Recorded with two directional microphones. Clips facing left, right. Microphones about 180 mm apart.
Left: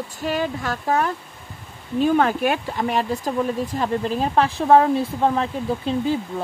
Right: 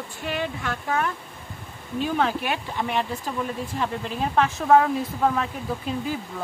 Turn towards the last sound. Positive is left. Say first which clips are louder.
# left 6 dB
turn(degrees=30)  # may be behind; listen again after turning